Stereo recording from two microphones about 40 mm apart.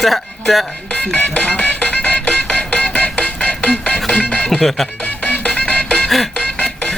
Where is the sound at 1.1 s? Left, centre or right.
Left.